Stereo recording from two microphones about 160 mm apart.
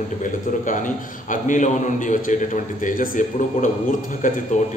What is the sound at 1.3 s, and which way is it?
A man's voice, 50° left (ahead or behind).